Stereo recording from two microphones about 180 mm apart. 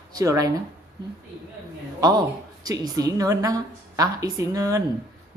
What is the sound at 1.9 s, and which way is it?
A woman's voice, 20° right (ahead or behind).